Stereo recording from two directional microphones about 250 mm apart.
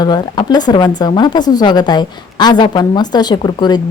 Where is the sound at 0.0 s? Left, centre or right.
Centre.